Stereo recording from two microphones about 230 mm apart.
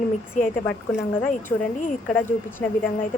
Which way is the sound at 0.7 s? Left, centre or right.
Centre.